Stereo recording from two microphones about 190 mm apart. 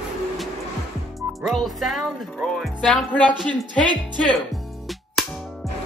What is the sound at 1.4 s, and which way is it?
Speech, centre (ahead or behind).